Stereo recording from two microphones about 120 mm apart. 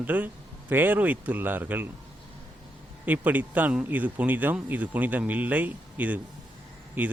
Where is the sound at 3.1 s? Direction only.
15° right (ahead or behind).